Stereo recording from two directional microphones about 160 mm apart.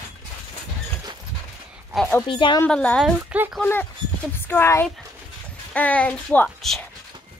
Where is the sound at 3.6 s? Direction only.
10° left (ahead or behind).